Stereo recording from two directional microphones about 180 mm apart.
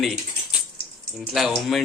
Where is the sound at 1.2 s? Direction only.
Centre (ahead or behind).